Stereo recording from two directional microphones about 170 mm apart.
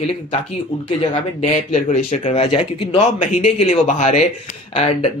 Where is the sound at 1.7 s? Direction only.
40° left (ahead or behind).